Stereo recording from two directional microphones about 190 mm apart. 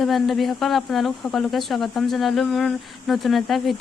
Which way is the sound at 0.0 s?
Centre (ahead or behind).